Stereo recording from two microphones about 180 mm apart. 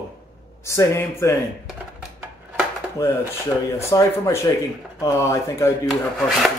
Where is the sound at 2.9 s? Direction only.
15° left (ahead or behind).